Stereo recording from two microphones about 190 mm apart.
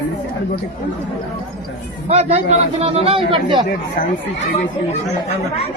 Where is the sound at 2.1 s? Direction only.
35° right (ahead or behind).